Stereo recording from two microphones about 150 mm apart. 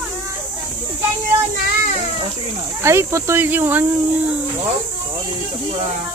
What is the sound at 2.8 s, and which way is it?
Speech, 20° right (ahead or behind).